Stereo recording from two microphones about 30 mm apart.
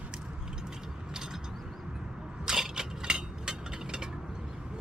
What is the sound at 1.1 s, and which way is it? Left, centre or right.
Mechanisms, centre.